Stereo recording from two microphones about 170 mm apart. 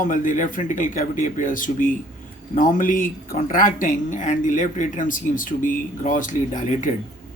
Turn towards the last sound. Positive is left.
turn(degrees=50)  # may be behind; listen again after turning